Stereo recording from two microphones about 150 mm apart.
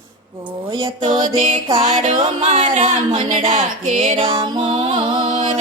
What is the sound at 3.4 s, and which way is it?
Music, 50° right (ahead or behind).